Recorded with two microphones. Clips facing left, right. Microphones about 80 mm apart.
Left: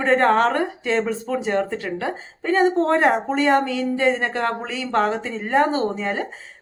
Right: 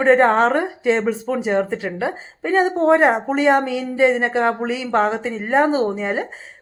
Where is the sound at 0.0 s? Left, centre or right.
Centre.